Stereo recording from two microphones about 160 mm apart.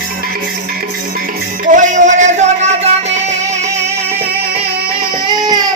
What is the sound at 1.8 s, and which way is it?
Music, 50° right (ahead or behind).